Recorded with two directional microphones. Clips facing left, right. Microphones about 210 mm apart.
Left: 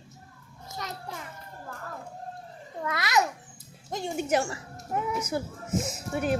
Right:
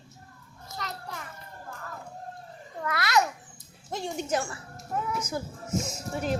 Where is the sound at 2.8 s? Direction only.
15° left (ahead or behind).